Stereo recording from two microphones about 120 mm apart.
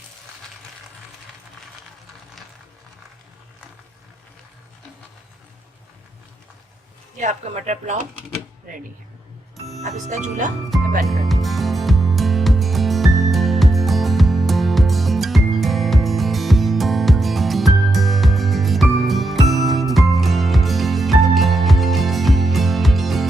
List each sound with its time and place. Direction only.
7.2 s speech: 75° right (ahead or behind)
10.1 s speech: 90° right
10.7 s music: centre (ahead or behind)